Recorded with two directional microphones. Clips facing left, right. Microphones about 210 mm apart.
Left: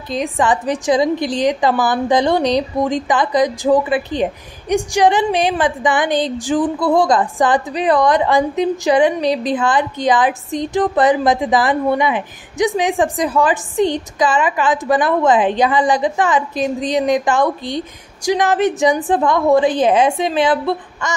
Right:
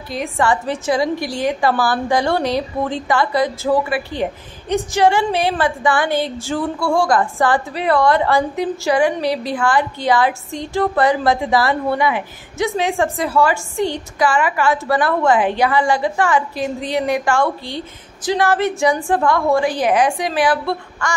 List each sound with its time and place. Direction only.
0.1 s a woman's voice: 15° left (ahead or behind)